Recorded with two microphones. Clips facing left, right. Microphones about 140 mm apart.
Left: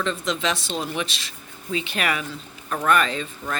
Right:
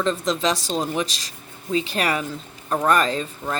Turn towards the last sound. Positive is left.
turn(degrees=-35)  # may be behind; listen again after turning